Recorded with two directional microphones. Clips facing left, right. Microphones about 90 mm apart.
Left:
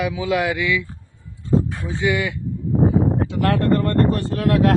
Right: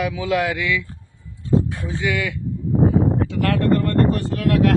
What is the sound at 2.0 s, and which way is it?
Speech, 25° left (ahead or behind).